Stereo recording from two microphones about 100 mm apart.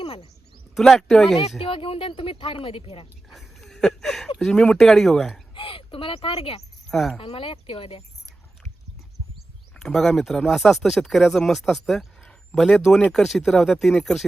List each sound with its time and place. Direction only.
0.0 s a sound: 90° left
0.8 s speech: 5° left (ahead or behind)
1.4 s speech: 80° left
3.2 s a sound: centre (ahead or behind)
4.4 s speech: 5° left (ahead or behind)
5.5 s speech: 60° left (ahead or behind)
6.8 s speech: centre (ahead or behind)
7.2 s speech: 65° left (ahead or behind)
9.7 s speech: 5° left (ahead or behind)